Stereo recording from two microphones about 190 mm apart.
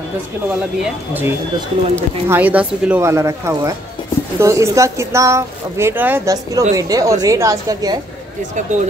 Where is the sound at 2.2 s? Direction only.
10° right (ahead or behind).